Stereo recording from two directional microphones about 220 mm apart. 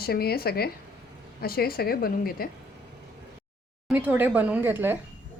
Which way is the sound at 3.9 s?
10° right (ahead or behind).